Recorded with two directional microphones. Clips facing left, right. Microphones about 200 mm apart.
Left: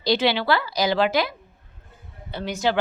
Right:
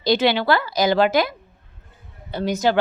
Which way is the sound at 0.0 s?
50° right (ahead or behind).